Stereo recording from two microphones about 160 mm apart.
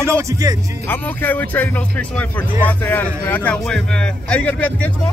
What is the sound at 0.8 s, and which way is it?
Speech, 10° left (ahead or behind).